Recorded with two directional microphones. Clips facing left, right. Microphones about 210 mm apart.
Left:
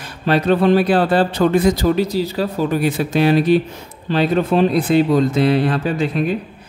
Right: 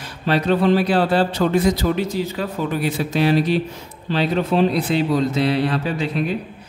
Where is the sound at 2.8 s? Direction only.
55° left (ahead or behind).